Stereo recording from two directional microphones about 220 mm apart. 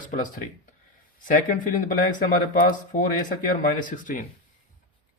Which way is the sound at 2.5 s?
40° left (ahead or behind).